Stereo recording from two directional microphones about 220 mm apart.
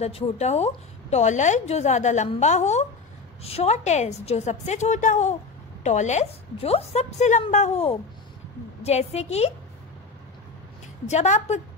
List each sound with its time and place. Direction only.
0.0 s a woman's voice: 30° left (ahead or behind)
11.1 s a woman's voice: 30° left (ahead or behind)